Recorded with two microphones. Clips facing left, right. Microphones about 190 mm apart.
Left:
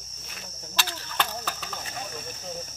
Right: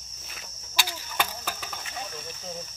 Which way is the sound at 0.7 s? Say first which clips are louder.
Even; 10° right (ahead or behind).